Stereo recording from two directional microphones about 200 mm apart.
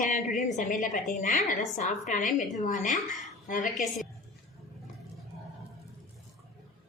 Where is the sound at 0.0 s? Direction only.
40° left (ahead or behind).